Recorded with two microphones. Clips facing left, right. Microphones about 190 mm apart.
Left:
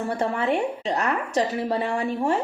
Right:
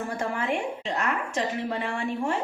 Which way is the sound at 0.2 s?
35° left (ahead or behind).